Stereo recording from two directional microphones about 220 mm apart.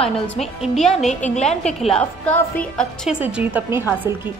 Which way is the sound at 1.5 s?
Centre (ahead or behind).